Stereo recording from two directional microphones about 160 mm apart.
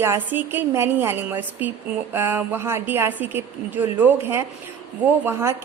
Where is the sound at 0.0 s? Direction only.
15° right (ahead or behind).